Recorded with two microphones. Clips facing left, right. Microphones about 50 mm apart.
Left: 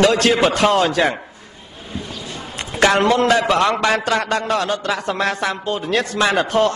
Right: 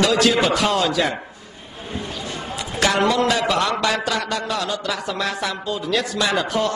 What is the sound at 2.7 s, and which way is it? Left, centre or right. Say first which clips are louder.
A man's voice: left 4 dB; left.